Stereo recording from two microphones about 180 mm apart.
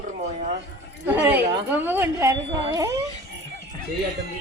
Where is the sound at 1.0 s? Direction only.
10° right (ahead or behind).